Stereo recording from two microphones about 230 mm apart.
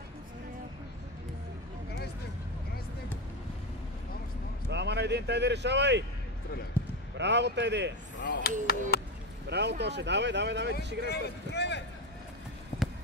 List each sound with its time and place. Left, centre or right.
4.6 s speech: right
6.8 s basketball bounce: centre
7.2 s speech: right
8.2 s speech: left
9.5 s speech: right
11.1 s speech: left